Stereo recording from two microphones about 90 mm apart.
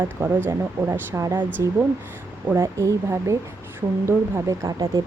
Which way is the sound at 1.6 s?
35° right (ahead or behind).